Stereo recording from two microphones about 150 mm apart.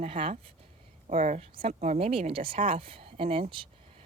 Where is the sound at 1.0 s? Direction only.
50° right (ahead or behind).